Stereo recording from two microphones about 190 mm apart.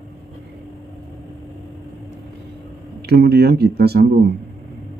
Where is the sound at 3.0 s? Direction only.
55° right (ahead or behind).